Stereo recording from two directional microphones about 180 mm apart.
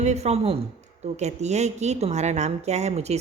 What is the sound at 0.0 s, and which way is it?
A woman's voice, 40° right (ahead or behind).